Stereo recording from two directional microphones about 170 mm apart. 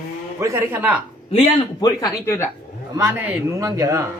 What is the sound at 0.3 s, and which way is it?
Speech, 15° right (ahead or behind).